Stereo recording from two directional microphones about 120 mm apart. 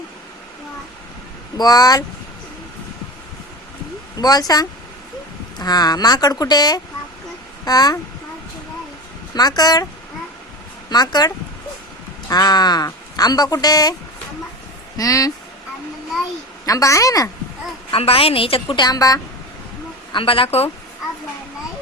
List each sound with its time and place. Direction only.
1.5 s speech: 35° left (ahead or behind)
4.2 s speech: 35° left (ahead or behind)
9.3 s speech: 35° left (ahead or behind)
10.8 s speech: 35° left (ahead or behind)
14.9 s a woman's voice: 30° left (ahead or behind)
16.6 s a woman's voice: 25° left (ahead or behind)
17.9 s a woman's voice: 50° left (ahead or behind)
18.9 s speech: 30° left (ahead or behind)
20.1 s a woman's voice: 50° left (ahead or behind)